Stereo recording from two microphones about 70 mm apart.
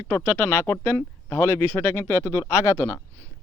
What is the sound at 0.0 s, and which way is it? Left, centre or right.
Speech, left.